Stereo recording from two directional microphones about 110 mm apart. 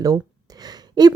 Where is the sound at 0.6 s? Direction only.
35° right (ahead or behind).